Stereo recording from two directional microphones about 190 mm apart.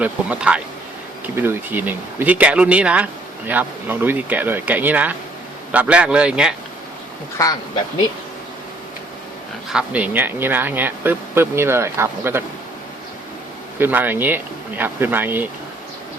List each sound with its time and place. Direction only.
0.0 s speech: 5° right (ahead or behind)
7.4 s speech: 15° left (ahead or behind)
9.6 s speech: 5° right (ahead or behind)
13.7 s speech: 10° right (ahead or behind)